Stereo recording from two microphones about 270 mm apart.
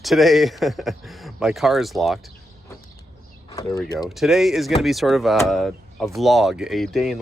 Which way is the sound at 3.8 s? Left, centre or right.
Centre.